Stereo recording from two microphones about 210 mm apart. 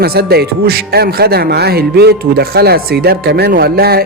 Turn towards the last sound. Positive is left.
turn(degrees=-45)  # may be behind; listen again after turning